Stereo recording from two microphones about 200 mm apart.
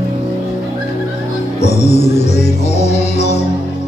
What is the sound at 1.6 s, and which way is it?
Music, 35° left (ahead or behind).